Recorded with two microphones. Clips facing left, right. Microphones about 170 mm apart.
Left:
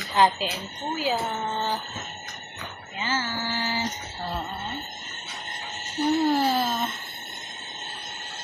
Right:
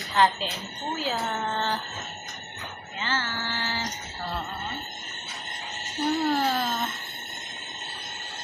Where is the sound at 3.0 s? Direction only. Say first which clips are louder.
Left 2 dB; 10° left (ahead or behind).